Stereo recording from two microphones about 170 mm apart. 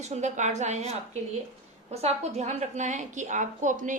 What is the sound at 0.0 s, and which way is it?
A woman's voice, 45° right (ahead or behind).